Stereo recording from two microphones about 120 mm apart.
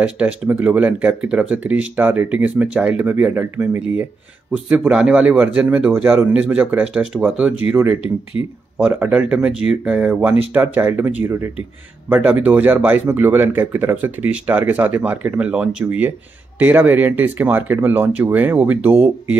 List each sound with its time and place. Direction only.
0.0 s speech: 10° right (ahead or behind)